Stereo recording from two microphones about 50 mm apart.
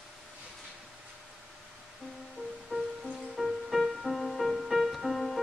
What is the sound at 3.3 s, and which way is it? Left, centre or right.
Music, centre.